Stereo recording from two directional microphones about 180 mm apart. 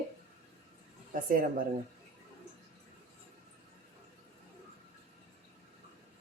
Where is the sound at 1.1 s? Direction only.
50° right (ahead or behind).